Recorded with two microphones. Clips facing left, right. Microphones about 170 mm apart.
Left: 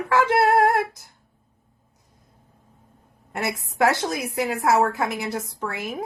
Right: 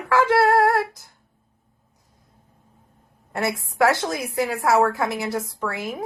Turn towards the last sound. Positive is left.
turn(degrees=20)  # may be behind; listen again after turning